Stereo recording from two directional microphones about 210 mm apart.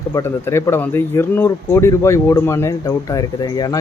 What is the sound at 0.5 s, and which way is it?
Speech, 10° left (ahead or behind).